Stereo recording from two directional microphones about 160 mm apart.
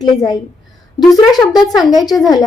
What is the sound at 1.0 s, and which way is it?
Speech, centre (ahead or behind).